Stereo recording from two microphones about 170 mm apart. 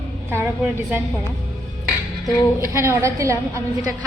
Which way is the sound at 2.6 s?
15° right (ahead or behind).